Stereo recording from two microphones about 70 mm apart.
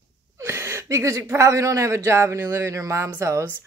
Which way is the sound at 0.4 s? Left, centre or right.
Right.